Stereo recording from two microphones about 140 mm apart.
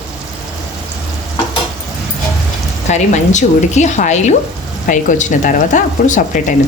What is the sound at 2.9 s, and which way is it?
Speech, 60° left (ahead or behind).